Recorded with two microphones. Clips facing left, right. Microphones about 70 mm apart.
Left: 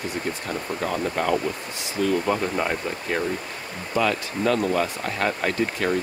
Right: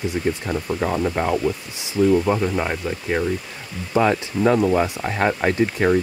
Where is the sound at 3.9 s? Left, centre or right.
Right.